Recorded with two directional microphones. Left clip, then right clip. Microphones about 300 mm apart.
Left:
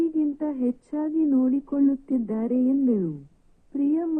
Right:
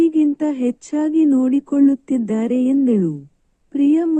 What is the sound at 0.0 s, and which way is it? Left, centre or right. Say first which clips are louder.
Speech: right 9 dB; right.